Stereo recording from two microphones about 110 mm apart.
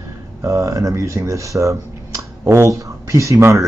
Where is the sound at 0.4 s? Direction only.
30° right (ahead or behind).